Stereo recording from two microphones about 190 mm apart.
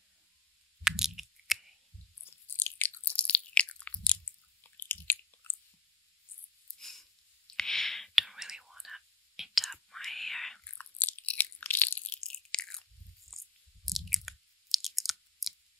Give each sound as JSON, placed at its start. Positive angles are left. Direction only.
{"t": 0.8, "sound": "a sound", "side_deg": 0}
{"t": 2.2, "sound": "biting", "side_deg": 10}
{"t": 4.6, "sound": "chewing", "side_deg": 10}
{"t": 6.8, "sound": "whispering", "side_deg": 0}
{"t": 12.4, "sound": "biting", "side_deg": 5}
{"t": 13.3, "sound": "chewing", "side_deg": 0}